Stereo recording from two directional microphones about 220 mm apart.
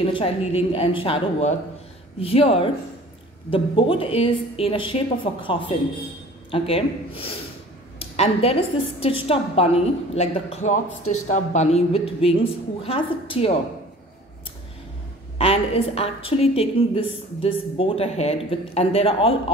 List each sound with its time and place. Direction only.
0.0 s a woman's voice: 25° left (ahead or behind)
15.3 s a woman's voice: 25° left (ahead or behind)